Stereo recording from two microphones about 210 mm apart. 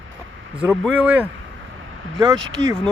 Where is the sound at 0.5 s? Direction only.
5° right (ahead or behind).